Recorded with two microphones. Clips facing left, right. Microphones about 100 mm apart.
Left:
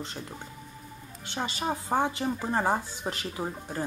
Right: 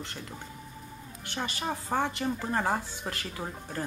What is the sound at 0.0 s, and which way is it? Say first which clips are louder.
A woman's voice: left 2 dB; 20° left (ahead or behind).